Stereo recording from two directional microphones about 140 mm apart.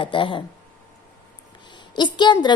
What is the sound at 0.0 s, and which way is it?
Speech, 35° left (ahead or behind).